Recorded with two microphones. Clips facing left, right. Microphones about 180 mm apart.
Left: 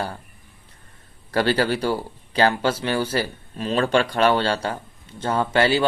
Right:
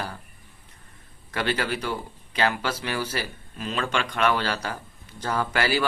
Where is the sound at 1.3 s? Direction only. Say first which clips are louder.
Left 7 dB; 35° left (ahead or behind).